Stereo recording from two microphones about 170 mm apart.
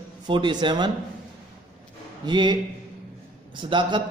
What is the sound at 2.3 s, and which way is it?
Speech, 25° right (ahead or behind).